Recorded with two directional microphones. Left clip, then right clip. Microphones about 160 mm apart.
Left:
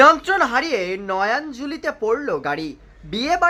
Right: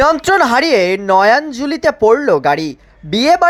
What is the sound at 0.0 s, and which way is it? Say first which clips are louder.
Speech: right 3 dB; 50° right (ahead or behind).